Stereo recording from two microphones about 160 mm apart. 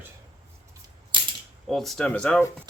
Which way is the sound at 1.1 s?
30° right (ahead or behind).